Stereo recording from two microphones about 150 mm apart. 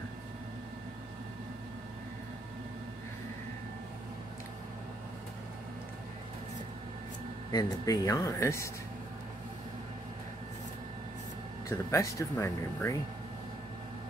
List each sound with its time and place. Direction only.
7.5 s speech: 25° left (ahead or behind)
11.7 s speech: 20° left (ahead or behind)